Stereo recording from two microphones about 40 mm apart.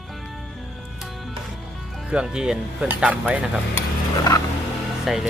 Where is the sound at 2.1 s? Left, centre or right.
Right.